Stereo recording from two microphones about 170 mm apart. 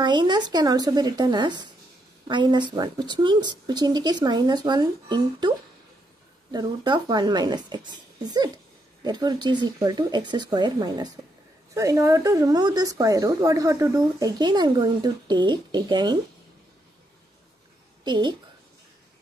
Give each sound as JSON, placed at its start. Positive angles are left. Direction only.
{"t": 0.0, "sound": "a woman's voice", "side_deg": -25}
{"t": 6.5, "sound": "a woman's voice", "side_deg": -25}
{"t": 18.0, "sound": "a woman's voice", "side_deg": -25}